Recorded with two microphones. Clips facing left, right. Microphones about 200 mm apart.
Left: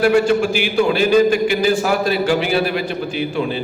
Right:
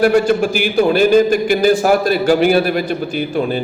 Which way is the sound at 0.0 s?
45° right (ahead or behind).